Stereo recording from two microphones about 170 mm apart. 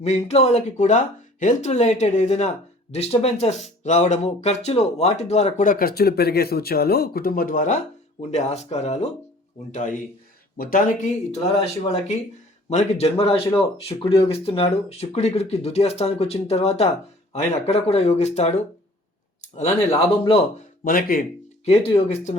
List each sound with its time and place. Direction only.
0.0 s speech: 40° left (ahead or behind)
12.7 s speech: 40° left (ahead or behind)
19.5 s speech: 35° left (ahead or behind)
20.8 s speech: 55° left (ahead or behind)
21.6 s speech: 35° left (ahead or behind)